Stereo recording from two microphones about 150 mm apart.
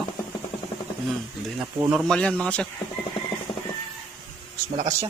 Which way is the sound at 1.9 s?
Centre (ahead or behind).